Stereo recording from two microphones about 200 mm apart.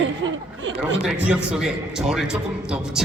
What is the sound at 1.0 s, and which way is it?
A man's voice, 5° right (ahead or behind).